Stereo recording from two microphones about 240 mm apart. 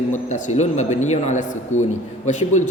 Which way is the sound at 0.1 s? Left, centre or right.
Left.